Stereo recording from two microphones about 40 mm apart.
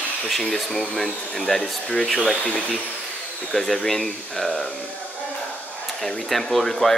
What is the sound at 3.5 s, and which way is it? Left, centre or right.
Speech, centre.